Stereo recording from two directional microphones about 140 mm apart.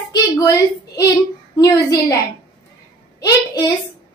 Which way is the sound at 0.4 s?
20° left (ahead or behind).